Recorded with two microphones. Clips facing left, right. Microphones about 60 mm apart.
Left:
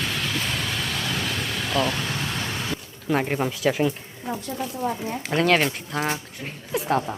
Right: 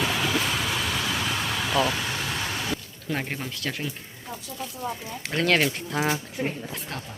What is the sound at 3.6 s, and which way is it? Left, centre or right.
Speech, centre.